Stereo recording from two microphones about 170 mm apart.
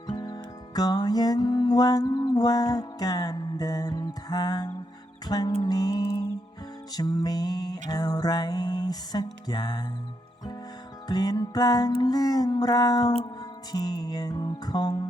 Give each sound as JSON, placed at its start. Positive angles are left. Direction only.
{"t": 0.1, "sound": "music", "side_deg": 25}
{"t": 11.1, "sound": "music", "side_deg": 25}